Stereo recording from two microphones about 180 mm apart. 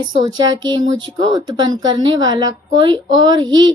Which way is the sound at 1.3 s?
25° right (ahead or behind).